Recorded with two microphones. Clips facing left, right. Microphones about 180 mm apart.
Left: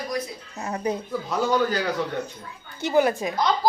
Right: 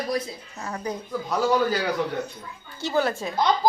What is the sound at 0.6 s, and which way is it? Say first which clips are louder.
Speech: left 4 dB; 25° left (ahead or behind).